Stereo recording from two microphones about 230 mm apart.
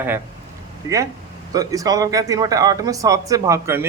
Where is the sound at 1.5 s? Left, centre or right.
Centre.